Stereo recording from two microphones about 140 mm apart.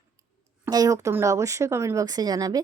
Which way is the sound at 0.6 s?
25° right (ahead or behind).